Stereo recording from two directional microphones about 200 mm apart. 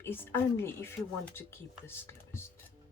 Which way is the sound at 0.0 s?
10° left (ahead or behind).